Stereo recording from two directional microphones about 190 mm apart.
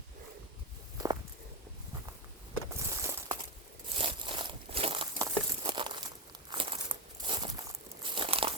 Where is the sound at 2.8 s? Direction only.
15° right (ahead or behind).